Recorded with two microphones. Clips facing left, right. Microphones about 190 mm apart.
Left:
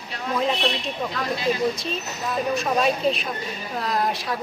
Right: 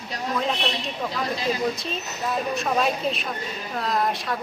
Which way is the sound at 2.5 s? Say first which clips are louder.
Left 2 dB; centre (ahead or behind).